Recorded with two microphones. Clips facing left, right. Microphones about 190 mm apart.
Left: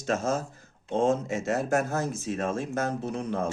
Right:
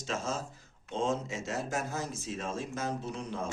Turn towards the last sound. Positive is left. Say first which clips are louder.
# left 7 dB
turn(degrees=55)  # may be behind; listen again after turning